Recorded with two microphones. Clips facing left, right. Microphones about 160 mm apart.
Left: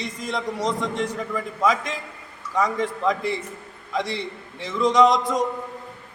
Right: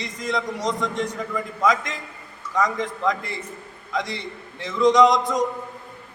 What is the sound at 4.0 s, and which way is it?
Speech, 30° left (ahead or behind).